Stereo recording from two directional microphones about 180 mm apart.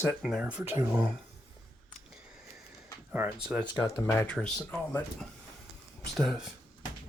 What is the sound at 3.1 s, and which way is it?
Speech, 10° right (ahead or behind).